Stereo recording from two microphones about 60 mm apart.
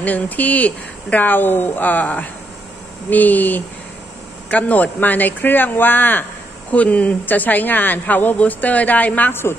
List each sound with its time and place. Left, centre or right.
0.0 s a woman's voice: left
9.3 s a woman's voice: left